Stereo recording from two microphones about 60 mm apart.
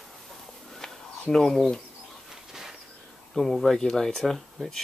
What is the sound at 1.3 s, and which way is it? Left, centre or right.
Speech, centre.